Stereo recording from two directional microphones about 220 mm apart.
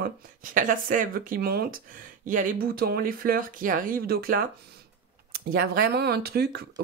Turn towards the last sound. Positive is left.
turn(degrees=-45)  # may be behind; listen again after turning